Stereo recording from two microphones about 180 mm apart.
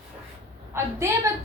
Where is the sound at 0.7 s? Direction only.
15° right (ahead or behind).